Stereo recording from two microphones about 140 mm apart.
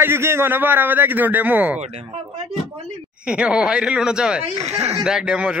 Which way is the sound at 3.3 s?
5° right (ahead or behind).